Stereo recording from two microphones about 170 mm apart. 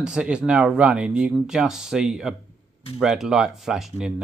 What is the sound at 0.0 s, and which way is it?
Speech, 5° right (ahead or behind).